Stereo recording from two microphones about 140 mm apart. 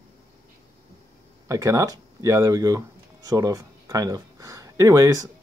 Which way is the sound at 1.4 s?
25° right (ahead or behind).